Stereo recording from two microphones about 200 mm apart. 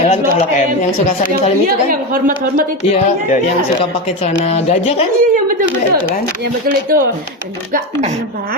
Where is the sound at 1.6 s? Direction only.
45° right (ahead or behind).